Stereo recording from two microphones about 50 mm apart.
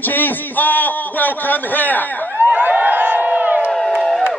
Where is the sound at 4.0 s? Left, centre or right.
Centre.